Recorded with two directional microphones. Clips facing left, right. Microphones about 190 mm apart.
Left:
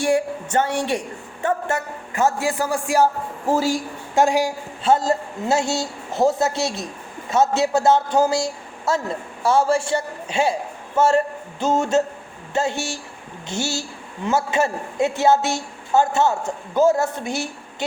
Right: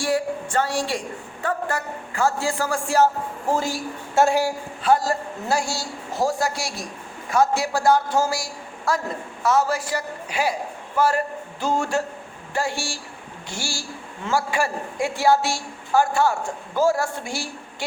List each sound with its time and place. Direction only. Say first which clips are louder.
0.0 s a woman's voice: left 3 dB; 20° left (ahead or behind)